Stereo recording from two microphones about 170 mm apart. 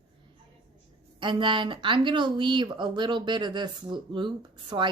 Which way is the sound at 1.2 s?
30° right (ahead or behind).